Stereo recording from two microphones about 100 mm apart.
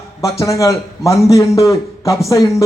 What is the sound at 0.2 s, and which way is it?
A man's voice, 30° left (ahead or behind).